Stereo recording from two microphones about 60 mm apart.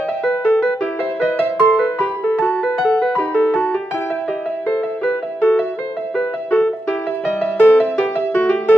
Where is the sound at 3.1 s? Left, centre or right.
Left.